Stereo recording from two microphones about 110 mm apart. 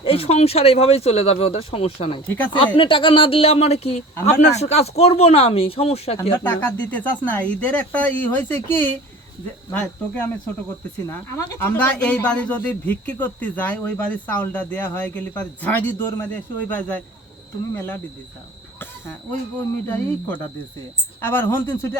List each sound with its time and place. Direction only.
0.0 s speech: 60° left (ahead or behind)
6.4 s a man's voice: 20° left (ahead or behind)
19.9 s a man's voice: 15° left (ahead or behind)